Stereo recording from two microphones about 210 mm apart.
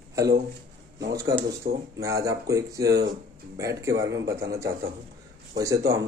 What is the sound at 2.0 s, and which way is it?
Speech, 15° right (ahead or behind).